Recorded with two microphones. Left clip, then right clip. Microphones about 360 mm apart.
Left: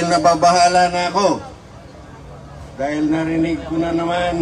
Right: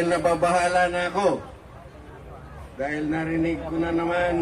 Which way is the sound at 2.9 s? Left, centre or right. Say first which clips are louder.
Left 8 dB; left.